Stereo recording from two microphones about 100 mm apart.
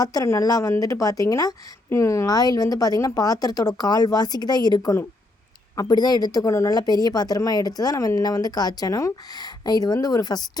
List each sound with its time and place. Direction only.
0.0 s speech: 40° left (ahead or behind)